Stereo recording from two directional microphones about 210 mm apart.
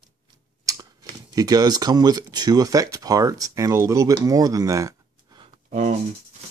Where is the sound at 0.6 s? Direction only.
15° right (ahead or behind).